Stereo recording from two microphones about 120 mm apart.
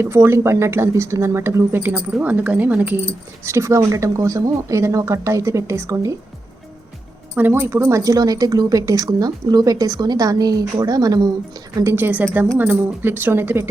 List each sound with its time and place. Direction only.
0.0 s speech: 20° right (ahead or behind)
7.3 s a woman's voice: 15° right (ahead or behind); by 11.3 s 35° right (ahead or behind)
11.8 s speech: 20° right (ahead or behind)